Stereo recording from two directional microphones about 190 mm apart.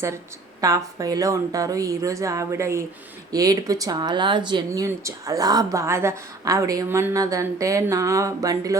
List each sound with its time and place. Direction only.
0.6 s speech: 20° right (ahead or behind)